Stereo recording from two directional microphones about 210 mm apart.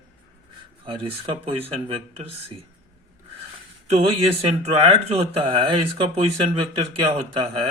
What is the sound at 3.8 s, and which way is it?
Speech, 30° right (ahead or behind).